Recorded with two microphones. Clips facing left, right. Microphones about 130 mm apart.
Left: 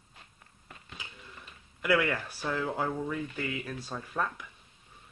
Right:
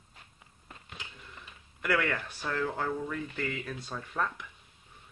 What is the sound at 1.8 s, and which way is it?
Speech, 5° left (ahead or behind).